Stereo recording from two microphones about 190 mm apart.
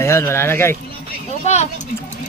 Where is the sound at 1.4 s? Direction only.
35° left (ahead or behind).